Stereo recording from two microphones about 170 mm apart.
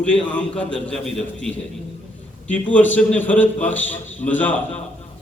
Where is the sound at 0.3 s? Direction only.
5° left (ahead or behind).